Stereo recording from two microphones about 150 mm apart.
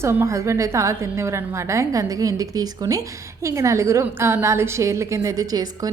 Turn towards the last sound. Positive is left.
turn(degrees=-25)  # may be behind; listen again after turning